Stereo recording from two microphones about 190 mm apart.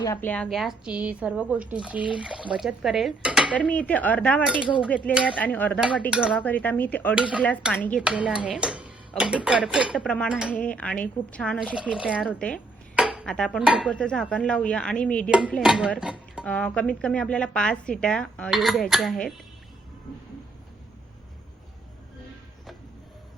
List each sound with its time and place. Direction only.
0.0 s speech: 15° left (ahead or behind); by 3.5 s 5° right (ahead or behind)
3.5 s speech: 5° left (ahead or behind)
4.6 s speech: 5° right (ahead or behind)
5.4 s speech: 10° left (ahead or behind)
6.1 s speech: 5° right (ahead or behind)
6.3 s speech: 10° left (ahead or behind)
7.2 s speech: 5° right (ahead or behind)
7.7 s speech: 10° left (ahead or behind)
8.0 s speech: 5° right (ahead or behind)
15.3 s speech: 5° right (ahead or behind)
16.0 s dishes: 5° right (ahead or behind)
16.5 s speech: 5° left (ahead or behind)